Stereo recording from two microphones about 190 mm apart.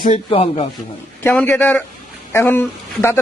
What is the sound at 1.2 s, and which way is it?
Speech, 10° left (ahead or behind).